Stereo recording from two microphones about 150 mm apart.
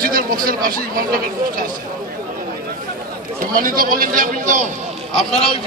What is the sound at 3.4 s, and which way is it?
Speech, 70° right (ahead or behind).